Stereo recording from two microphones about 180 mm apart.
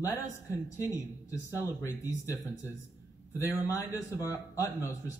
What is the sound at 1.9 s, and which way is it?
Speech, 15° left (ahead or behind).